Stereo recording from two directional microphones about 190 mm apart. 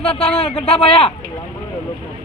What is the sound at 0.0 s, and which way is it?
A man's voice, 30° left (ahead or behind).